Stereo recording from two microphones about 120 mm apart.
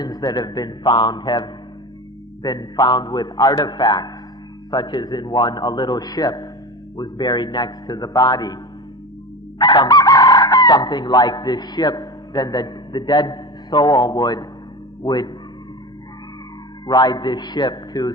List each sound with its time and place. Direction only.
0.0 s a man's voice: 35° left (ahead or behind)
9.6 s chicken: 35° left (ahead or behind)
15.0 s a man's voice: 35° left (ahead or behind)
16.8 s a man's voice: 30° left (ahead or behind)